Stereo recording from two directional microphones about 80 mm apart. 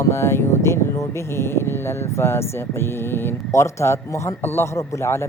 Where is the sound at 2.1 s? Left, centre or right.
Left.